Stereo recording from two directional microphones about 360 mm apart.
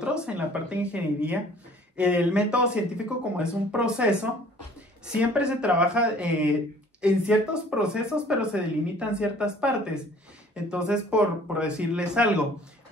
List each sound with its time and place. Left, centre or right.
0.0 s speech: centre